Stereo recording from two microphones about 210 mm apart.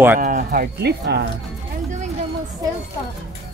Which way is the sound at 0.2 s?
40° right (ahead or behind).